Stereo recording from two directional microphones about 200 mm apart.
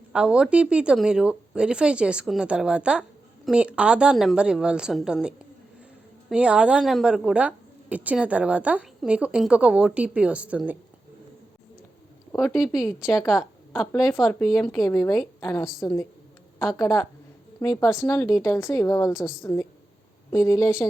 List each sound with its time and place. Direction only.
0.1 s speech: 5° right (ahead or behind)
6.3 s speech: 5° right (ahead or behind)
12.4 s a woman's voice: centre (ahead or behind)
14.8 s speech: 20° left (ahead or behind)